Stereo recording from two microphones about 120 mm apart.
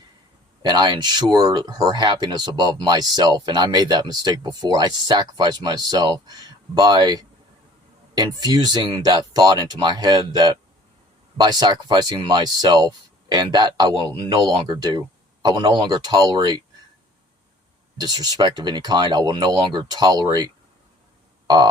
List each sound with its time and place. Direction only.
0.6 s speech: 35° right (ahead or behind)
17.9 s speech: 35° right (ahead or behind)
21.4 s music: 35° right (ahead or behind)